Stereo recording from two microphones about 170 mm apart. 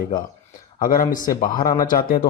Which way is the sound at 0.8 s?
55° left (ahead or behind).